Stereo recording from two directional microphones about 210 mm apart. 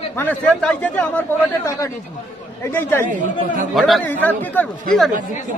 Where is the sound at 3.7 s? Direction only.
Centre (ahead or behind).